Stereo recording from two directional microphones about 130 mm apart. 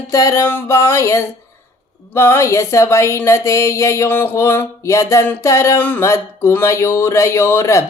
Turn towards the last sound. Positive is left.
turn(degrees=20)  # may be behind; listen again after turning